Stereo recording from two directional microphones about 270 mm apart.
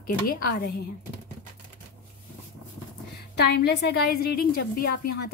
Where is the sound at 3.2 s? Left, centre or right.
Left.